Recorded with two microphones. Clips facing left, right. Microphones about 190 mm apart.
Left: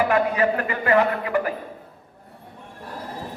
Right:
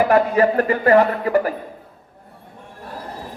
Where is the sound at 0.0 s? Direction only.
40° right (ahead or behind).